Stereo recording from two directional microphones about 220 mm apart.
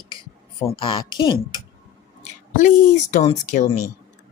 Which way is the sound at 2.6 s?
35° left (ahead or behind).